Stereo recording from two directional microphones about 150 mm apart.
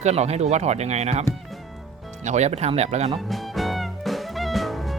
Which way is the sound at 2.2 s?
50° right (ahead or behind).